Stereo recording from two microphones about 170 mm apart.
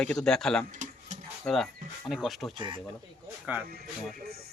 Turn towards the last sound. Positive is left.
turn(degrees=-65)  # may be behind; listen again after turning